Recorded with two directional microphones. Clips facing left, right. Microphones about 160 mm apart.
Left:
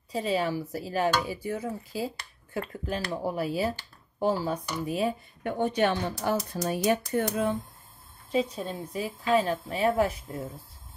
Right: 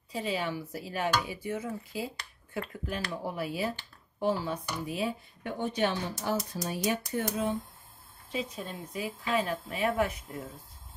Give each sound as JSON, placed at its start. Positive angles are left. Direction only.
{"t": 0.1, "sound": "speech", "side_deg": 35}
{"t": 8.3, "sound": "speech", "side_deg": 40}